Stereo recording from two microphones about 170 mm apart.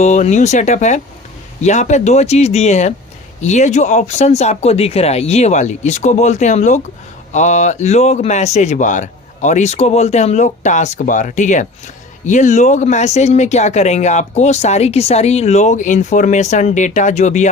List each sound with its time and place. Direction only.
0.0 s speech: 40° left (ahead or behind)